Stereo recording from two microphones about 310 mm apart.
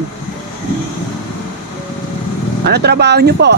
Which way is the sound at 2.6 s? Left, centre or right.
Right.